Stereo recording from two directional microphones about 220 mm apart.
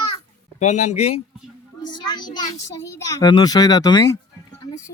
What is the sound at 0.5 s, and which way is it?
A man's voice, 30° left (ahead or behind).